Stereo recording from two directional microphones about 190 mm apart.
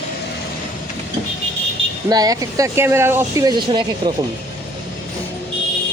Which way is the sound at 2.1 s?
20° right (ahead or behind).